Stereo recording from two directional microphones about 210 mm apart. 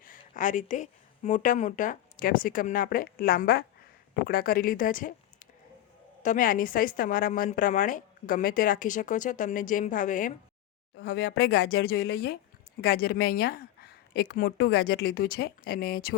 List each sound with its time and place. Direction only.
0.0 s a woman's voice: 40° left (ahead or behind)
10.9 s a woman's voice: 50° left (ahead or behind)